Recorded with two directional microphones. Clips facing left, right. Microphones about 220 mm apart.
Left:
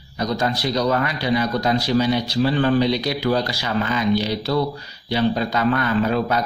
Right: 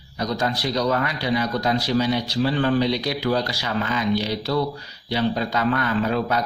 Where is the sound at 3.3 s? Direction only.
25° left (ahead or behind).